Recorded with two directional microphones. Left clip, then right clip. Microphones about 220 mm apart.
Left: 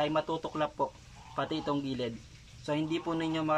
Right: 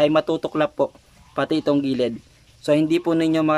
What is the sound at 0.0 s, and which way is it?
Speech, 50° right (ahead or behind).